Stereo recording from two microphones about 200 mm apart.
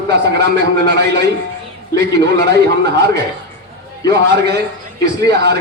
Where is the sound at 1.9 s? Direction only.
55° right (ahead or behind).